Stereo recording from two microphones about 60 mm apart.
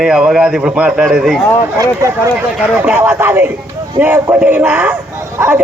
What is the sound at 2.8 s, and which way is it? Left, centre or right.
Speech, right.